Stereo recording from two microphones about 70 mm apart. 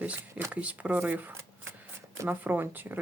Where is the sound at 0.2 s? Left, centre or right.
Right.